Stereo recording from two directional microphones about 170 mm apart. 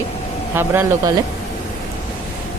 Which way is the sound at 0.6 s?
15° right (ahead or behind).